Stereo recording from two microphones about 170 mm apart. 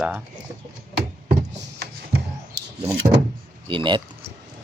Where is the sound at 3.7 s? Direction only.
30° right (ahead or behind).